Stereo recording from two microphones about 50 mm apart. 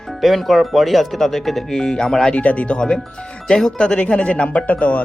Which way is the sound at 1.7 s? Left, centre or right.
Centre.